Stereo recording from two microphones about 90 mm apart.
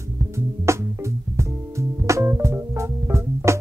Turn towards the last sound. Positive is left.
turn(degrees=-30)  # may be behind; listen again after turning